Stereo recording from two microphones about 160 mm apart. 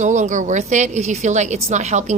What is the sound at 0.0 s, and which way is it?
A woman's voice, 50° right (ahead or behind).